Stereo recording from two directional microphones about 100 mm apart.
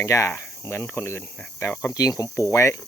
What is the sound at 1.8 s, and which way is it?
Speech, 35° left (ahead or behind).